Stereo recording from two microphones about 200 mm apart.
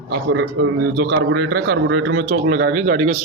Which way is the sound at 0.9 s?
55° right (ahead or behind).